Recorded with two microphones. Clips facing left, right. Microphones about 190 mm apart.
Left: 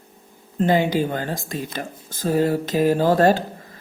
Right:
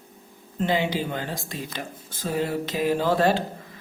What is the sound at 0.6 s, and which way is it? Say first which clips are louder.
Speech: left 6 dB; 45° left (ahead or behind).